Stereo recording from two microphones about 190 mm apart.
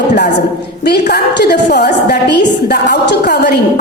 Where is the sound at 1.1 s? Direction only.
60° left (ahead or behind).